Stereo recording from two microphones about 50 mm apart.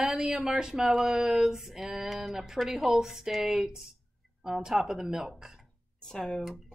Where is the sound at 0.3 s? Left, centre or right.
Centre.